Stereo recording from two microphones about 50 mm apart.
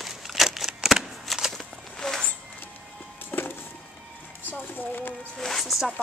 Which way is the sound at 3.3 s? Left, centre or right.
Left.